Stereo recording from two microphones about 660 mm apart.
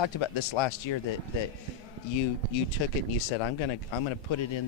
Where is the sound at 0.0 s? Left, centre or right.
Left.